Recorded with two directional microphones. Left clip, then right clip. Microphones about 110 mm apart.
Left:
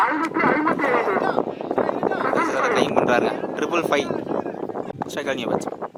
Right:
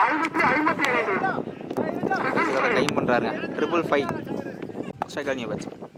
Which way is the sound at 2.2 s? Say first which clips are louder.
Left 2 dB; 45° right (ahead or behind).